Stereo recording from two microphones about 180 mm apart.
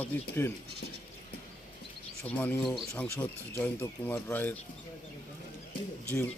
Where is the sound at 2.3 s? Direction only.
10° left (ahead or behind).